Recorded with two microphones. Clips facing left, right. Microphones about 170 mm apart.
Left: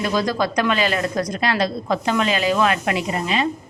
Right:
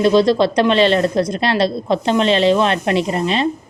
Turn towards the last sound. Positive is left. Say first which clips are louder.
# right 5 dB
turn(degrees=-30)  # may be behind; listen again after turning